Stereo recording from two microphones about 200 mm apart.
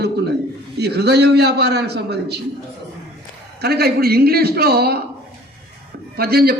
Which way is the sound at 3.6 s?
55° right (ahead or behind).